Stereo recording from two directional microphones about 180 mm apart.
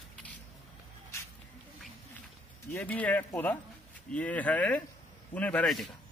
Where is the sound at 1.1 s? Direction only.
15° left (ahead or behind).